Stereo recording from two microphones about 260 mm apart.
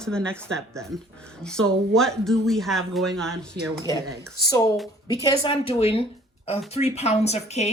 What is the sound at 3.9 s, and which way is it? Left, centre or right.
Speech, centre.